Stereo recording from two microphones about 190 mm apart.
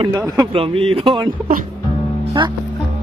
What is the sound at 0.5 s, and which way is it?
Speech, 30° right (ahead or behind).